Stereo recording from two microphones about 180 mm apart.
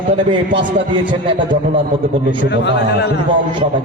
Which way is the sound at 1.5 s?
45° right (ahead or behind).